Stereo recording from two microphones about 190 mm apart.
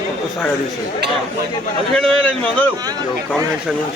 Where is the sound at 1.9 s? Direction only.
5° left (ahead or behind).